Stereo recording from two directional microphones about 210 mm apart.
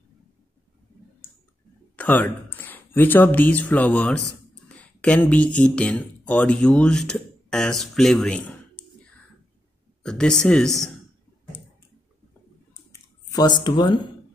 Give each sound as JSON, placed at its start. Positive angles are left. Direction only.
{"t": 2.0, "sound": "speech", "side_deg": 10}
{"t": 10.0, "sound": "speech", "side_deg": 5}
{"t": 12.9, "sound": "a sound", "side_deg": 20}